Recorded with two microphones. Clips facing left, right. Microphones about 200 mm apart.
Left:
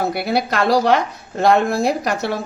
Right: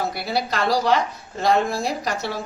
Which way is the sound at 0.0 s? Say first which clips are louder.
Left 5 dB; 60° left (ahead or behind).